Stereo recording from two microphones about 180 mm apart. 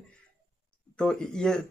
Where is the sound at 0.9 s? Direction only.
5° left (ahead or behind).